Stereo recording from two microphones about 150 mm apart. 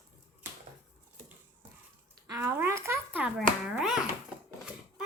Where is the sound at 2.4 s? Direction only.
15° right (ahead or behind).